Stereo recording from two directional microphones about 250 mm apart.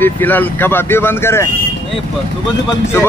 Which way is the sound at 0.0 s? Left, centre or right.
Centre.